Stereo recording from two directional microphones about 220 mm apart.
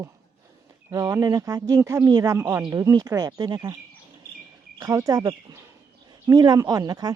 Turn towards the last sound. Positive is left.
turn(degrees=-15)  # may be behind; listen again after turning